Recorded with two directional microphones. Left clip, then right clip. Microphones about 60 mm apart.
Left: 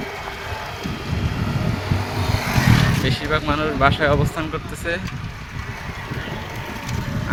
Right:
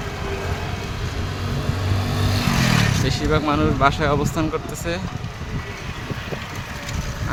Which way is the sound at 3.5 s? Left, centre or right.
Right.